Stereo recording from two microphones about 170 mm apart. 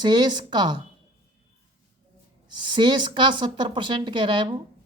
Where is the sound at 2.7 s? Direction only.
25° right (ahead or behind).